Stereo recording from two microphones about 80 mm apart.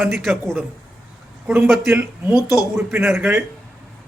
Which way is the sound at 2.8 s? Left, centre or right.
Right.